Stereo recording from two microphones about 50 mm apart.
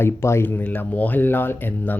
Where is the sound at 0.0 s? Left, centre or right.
Left.